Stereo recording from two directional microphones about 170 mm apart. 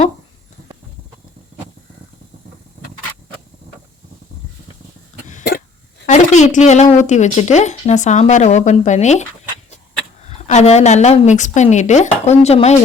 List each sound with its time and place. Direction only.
6.1 s a woman's voice: 45° left (ahead or behind)
10.2 s a woman's voice: 40° left (ahead or behind)